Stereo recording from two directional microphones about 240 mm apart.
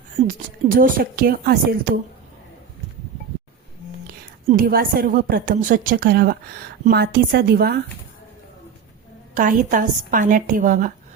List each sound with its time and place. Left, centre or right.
0.3 s a woman's voice: right
4.0 s a woman's voice: right
9.3 s a woman's voice: right